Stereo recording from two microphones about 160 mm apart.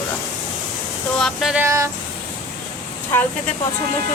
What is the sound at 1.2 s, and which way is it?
Speech, centre (ahead or behind).